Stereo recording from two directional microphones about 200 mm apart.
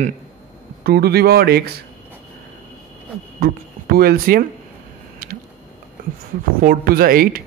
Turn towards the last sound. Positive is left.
turn(degrees=-45)  # may be behind; listen again after turning